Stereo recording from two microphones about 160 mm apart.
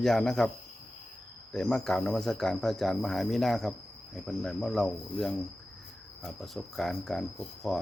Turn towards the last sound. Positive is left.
turn(degrees=0)  # may be behind; listen again after turning